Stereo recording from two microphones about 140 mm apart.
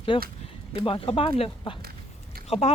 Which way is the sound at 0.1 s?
35° left (ahead or behind).